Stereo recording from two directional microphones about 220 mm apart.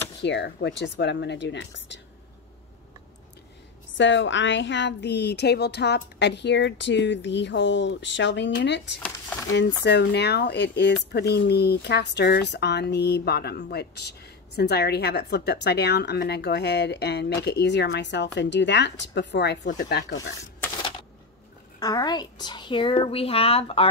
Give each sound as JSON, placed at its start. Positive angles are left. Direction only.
{"t": 0.2, "sound": "speech", "side_deg": 50}
{"t": 3.9, "sound": "speech", "side_deg": 55}
{"t": 21.7, "sound": "a woman's voice", "side_deg": 15}